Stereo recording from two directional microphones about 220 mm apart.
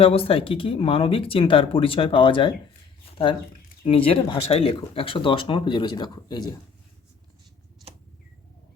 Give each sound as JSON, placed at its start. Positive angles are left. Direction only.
{"t": 0.0, "sound": "speech", "side_deg": 25}
{"t": 3.8, "sound": "speech", "side_deg": 25}